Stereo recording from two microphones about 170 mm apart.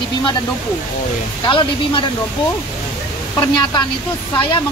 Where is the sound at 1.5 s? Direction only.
30° left (ahead or behind).